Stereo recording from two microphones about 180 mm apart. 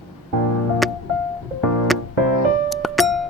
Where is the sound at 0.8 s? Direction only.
Centre (ahead or behind).